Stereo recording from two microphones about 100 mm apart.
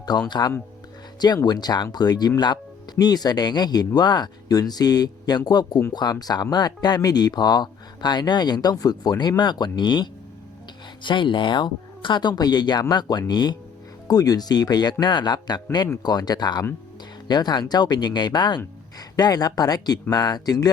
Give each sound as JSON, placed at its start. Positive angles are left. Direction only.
{"t": 0.0, "sound": "speech", "side_deg": 45}